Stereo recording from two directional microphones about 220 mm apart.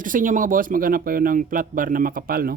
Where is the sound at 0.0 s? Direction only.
35° right (ahead or behind).